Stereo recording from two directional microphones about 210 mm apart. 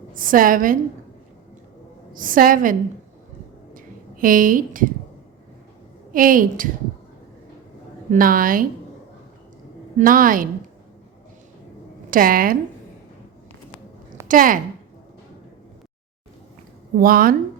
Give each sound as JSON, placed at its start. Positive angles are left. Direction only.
{"t": 0.1, "sound": "a woman's voice", "side_deg": -40}
{"t": 2.1, "sound": "a woman's voice", "side_deg": -40}
{"t": 3.8, "sound": "a sound", "side_deg": -40}
{"t": 6.1, "sound": "a woman's voice", "side_deg": -40}
{"t": 8.1, "sound": "a woman's voice", "side_deg": -40}
{"t": 10.0, "sound": "a woman's voice", "side_deg": -40}
{"t": 12.1, "sound": "a woman's voice", "side_deg": -40}
{"t": 14.3, "sound": "a woman's voice", "side_deg": -40}
{"t": 17.0, "sound": "a woman's voice", "side_deg": -45}